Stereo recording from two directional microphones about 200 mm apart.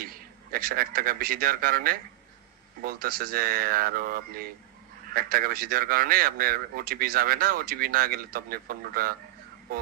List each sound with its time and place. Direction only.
0.0 s a man's voice: 45° right (ahead or behind)